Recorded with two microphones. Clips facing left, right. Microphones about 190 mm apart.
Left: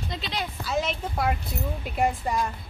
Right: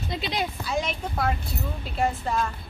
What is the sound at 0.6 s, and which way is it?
A woman's voice, centre (ahead or behind).